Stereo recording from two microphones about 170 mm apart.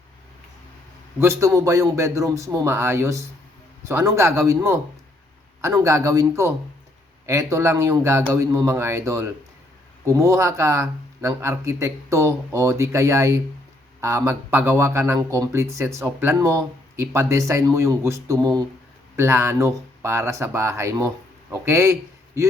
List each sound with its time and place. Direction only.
1.2 s speech: 15° right (ahead or behind)